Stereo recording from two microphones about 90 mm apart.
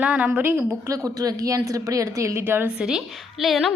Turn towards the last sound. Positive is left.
turn(degrees=0)  # may be behind; listen again after turning